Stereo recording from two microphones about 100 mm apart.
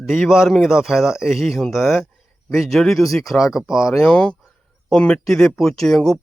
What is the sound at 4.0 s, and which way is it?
Speech, 10° left (ahead or behind).